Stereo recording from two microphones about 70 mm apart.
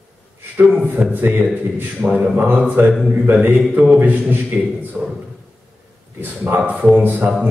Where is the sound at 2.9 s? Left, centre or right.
Centre.